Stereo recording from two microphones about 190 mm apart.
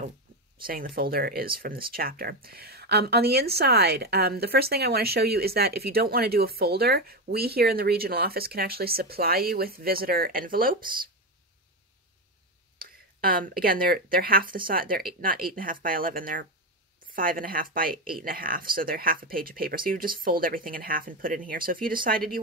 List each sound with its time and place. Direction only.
0.6 s speech: 50° right (ahead or behind)
12.7 s speech: 50° right (ahead or behind)